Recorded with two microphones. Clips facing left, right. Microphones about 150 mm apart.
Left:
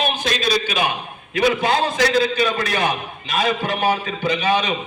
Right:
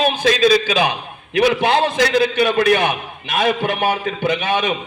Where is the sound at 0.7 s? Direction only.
90° right.